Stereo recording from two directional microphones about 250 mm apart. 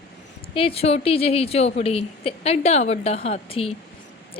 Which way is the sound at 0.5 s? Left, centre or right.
Left.